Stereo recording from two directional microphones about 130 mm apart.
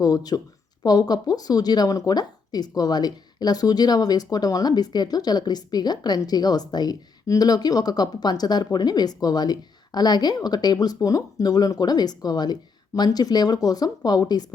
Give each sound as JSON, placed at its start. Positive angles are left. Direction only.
{"t": 0.0, "sound": "a woman's voice", "side_deg": 30}